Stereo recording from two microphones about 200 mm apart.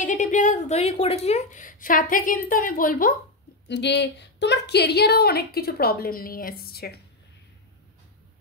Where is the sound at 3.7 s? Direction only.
60° left (ahead or behind).